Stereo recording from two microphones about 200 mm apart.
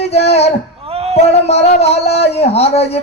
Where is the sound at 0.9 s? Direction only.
30° right (ahead or behind).